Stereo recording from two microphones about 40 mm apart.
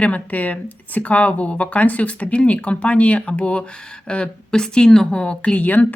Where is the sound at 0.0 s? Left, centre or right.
Left; by 5.2 s centre.